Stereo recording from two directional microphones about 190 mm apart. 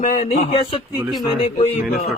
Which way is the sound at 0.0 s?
40° left (ahead or behind).